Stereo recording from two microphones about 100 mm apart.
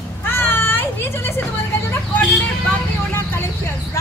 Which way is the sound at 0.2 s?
20° left (ahead or behind).